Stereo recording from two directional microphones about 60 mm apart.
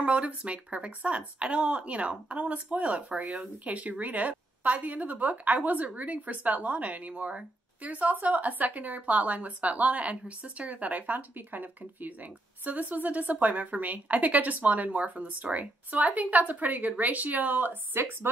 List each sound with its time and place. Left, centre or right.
0.0 s speech: right